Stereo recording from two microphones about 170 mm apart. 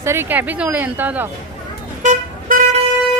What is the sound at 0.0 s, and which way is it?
Speech, 15° right (ahead or behind).